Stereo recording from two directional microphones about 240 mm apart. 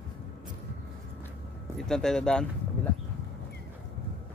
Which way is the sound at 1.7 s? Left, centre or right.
Centre.